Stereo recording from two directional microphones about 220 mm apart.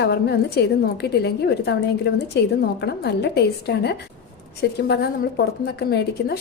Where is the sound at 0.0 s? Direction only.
50° left (ahead or behind).